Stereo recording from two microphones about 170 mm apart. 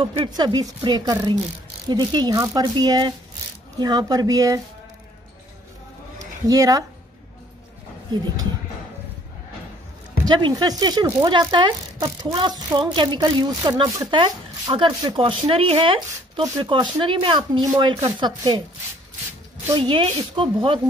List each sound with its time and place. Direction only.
0.0 s speech: 25° right (ahead or behind)
6.1 s a sound: 20° right (ahead or behind)
10.2 s speech: 25° right (ahead or behind)
19.7 s speech: 30° right (ahead or behind)